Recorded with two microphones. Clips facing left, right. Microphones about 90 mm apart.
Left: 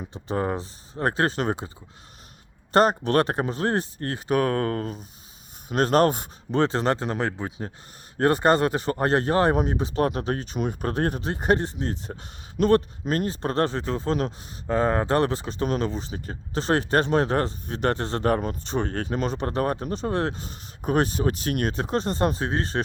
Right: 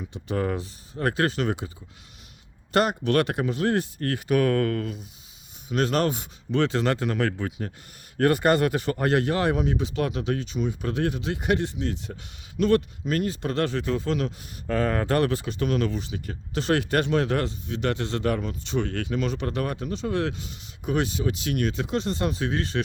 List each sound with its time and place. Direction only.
0.0 s speech: 35° left (ahead or behind)
2.7 s speech: 35° left (ahead or behind)